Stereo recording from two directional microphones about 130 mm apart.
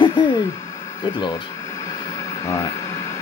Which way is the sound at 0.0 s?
35° left (ahead or behind).